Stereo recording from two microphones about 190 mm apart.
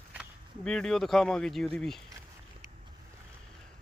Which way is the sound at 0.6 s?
5° left (ahead or behind).